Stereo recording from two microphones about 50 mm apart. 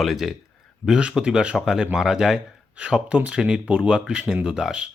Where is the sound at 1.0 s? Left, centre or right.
Centre.